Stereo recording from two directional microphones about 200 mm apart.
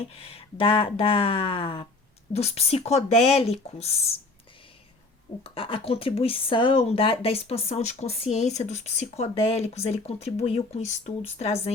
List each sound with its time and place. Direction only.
0.1 s speech: 30° left (ahead or behind)
5.4 s speech: 25° left (ahead or behind)